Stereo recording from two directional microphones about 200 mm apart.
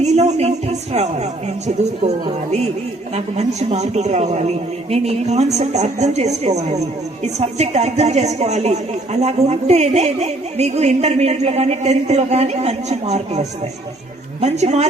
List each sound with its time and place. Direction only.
0.0 s a woman's voice: 35° right (ahead or behind)
14.4 s a woman's voice: 35° right (ahead or behind)